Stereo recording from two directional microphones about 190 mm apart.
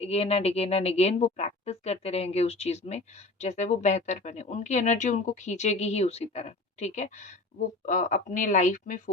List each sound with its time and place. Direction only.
0.0 s speech: 30° left (ahead or behind)